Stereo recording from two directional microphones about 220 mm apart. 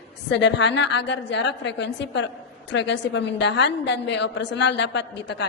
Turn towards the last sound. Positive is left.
turn(degrees=50)  # may be behind; listen again after turning